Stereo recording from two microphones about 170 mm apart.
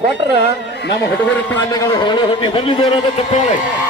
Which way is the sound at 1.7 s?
25° left (ahead or behind).